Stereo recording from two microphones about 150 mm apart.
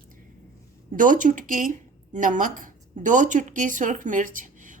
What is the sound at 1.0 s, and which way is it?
A woman's voice, 60° right (ahead or behind).